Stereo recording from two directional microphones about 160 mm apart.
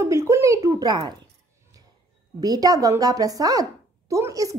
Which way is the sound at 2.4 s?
25° right (ahead or behind).